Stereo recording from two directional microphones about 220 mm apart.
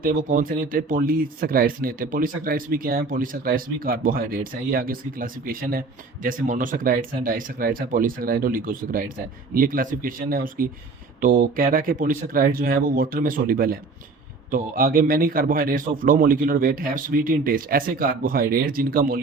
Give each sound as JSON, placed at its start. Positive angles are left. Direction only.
{"t": 0.0, "sound": "speech", "side_deg": -40}